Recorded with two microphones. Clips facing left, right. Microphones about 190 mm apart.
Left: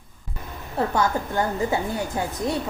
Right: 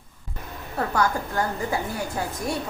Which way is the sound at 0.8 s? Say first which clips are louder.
Left 2 dB; 25° left (ahead or behind).